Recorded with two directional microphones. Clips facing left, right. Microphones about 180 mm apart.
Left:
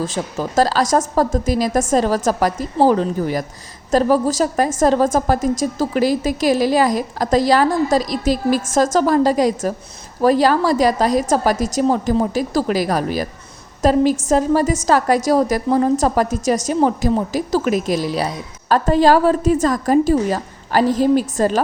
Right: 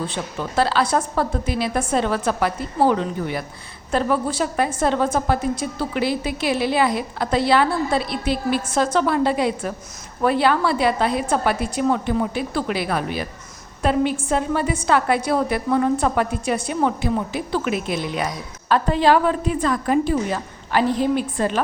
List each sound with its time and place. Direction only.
0.3 s a woman's voice: 40° left (ahead or behind)